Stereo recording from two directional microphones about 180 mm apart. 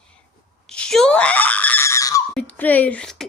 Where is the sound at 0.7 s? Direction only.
5° left (ahead or behind).